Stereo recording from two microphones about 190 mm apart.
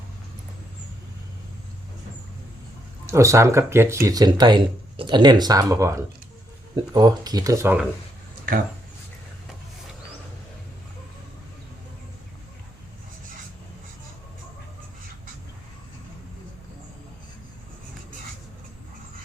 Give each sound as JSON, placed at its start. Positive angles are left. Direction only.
{"t": 3.1, "sound": "speech", "side_deg": -15}